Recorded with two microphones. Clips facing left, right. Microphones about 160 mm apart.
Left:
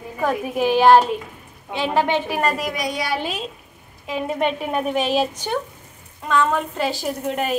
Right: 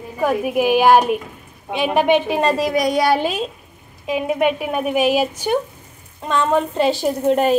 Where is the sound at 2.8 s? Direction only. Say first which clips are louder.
Right 9 dB; 50° right (ahead or behind).